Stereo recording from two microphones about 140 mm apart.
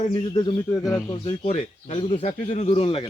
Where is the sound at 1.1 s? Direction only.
50° left (ahead or behind).